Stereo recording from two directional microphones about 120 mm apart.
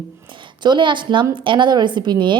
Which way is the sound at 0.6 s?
40° right (ahead or behind).